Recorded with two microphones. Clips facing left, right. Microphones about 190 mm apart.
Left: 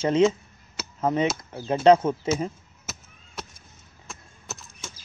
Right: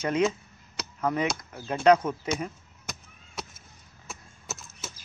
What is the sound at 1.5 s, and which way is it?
Speech, 25° left (ahead or behind).